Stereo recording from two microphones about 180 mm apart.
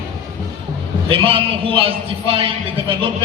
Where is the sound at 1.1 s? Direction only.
30° right (ahead or behind).